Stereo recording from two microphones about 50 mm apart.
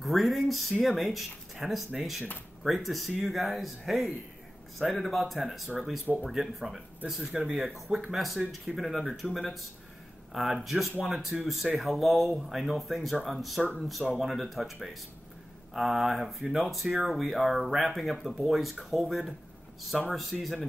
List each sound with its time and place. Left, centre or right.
0.0 s speech: centre
16.8 s speech: centre
17.1 s speech: centre